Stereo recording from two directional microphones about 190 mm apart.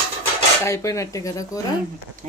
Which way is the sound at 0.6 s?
15° left (ahead or behind).